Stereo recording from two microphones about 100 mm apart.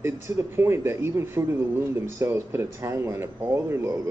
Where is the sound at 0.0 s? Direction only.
25° right (ahead or behind).